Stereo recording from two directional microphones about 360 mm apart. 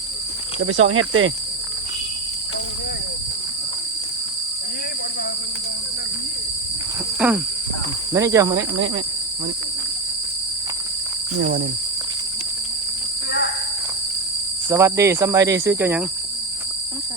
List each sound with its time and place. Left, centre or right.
0.9 s speech: right
7.2 s speech: centre
8.1 s cricket: centre
14.7 s cricket: centre